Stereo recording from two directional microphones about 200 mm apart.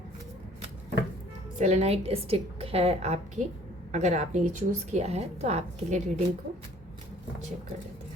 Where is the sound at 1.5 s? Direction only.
35° right (ahead or behind).